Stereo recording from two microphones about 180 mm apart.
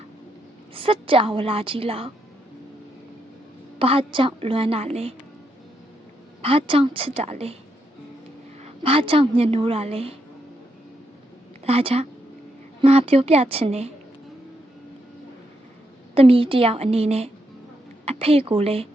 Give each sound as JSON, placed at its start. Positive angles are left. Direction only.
{"t": 0.7, "sound": "a woman's voice", "side_deg": -30}
{"t": 3.8, "sound": "a woman's voice", "side_deg": -30}
{"t": 6.4, "sound": "a woman's voice", "side_deg": -30}
{"t": 8.6, "sound": "a woman's voice", "side_deg": -30}
{"t": 11.6, "sound": "a woman's voice", "side_deg": -35}
{"t": 16.1, "sound": "a woman's voice", "side_deg": -30}